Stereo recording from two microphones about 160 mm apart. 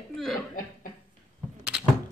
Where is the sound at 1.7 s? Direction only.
5° right (ahead or behind).